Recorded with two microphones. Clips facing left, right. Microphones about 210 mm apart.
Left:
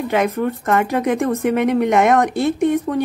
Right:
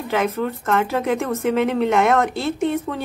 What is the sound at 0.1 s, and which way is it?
Speech, 15° left (ahead or behind).